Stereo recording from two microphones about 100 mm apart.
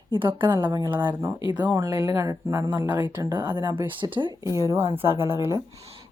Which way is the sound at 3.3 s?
20° right (ahead or behind).